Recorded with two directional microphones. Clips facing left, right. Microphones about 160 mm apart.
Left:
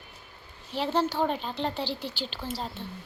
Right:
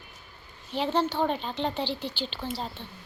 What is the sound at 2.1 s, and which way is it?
Speech, 5° left (ahead or behind).